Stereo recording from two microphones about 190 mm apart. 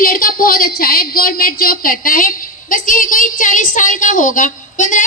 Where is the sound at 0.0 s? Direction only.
50° left (ahead or behind).